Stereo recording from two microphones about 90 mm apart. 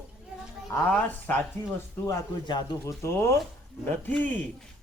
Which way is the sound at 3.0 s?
30° left (ahead or behind).